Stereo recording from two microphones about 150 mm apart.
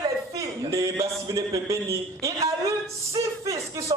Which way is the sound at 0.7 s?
20° right (ahead or behind).